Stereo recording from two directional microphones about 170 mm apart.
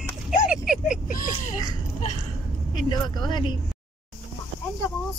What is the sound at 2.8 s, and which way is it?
Speech, 25° left (ahead or behind).